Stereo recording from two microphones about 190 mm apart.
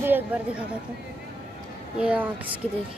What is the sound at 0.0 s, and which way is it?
Speech, 10° right (ahead or behind).